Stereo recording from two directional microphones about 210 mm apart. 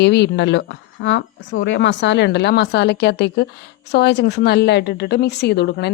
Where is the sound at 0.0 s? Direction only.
55° left (ahead or behind).